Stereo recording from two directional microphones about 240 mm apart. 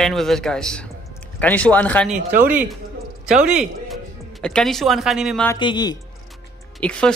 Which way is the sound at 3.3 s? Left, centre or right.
Centre.